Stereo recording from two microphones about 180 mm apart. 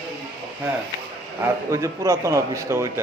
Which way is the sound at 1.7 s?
15° right (ahead or behind).